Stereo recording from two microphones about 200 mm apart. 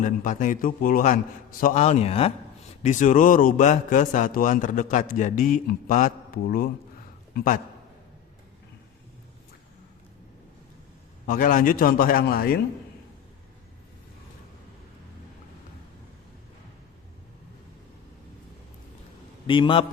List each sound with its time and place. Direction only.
0.0 s a man's voice: 40° left (ahead or behind)
11.3 s a man's voice: 40° left (ahead or behind)
19.5 s a man's voice: 25° left (ahead or behind)